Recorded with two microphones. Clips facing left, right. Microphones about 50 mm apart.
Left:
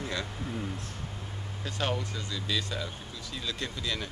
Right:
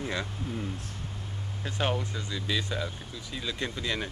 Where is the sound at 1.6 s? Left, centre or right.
Centre.